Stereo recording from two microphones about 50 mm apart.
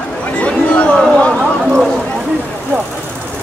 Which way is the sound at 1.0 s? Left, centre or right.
Centre.